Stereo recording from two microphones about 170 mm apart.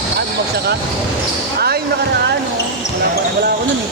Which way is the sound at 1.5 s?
65° right (ahead or behind).